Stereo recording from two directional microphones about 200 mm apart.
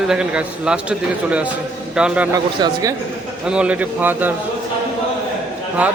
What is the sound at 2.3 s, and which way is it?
Speech, 20° right (ahead or behind).